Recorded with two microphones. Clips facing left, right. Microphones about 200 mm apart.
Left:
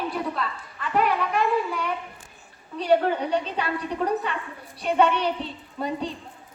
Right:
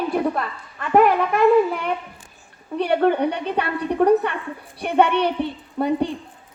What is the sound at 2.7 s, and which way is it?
A woman's voice, 60° right (ahead or behind).